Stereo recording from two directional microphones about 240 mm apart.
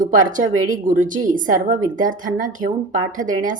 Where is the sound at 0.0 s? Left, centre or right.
Right.